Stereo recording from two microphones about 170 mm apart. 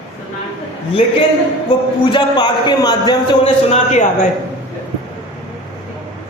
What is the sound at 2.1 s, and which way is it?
A man's voice, 25° left (ahead or behind).